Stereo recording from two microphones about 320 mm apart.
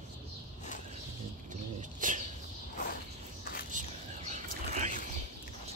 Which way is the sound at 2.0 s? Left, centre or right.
Right.